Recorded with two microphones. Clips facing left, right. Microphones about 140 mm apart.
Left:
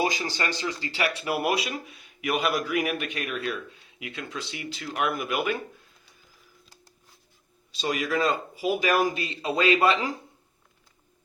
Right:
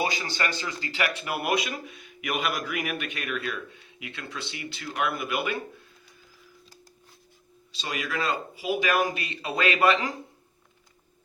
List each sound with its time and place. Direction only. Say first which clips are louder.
0.0 s speech: left 2 dB; 40° left (ahead or behind)
7.7 s speech: left 5 dB; 45° left (ahead or behind)
9.1 s speech: left 3 dB; 25° left (ahead or behind)